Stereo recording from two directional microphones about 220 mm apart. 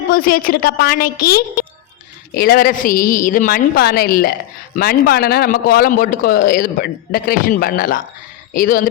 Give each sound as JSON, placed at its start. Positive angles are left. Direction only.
{"t": 0.1, "sound": "a man's voice", "side_deg": 40}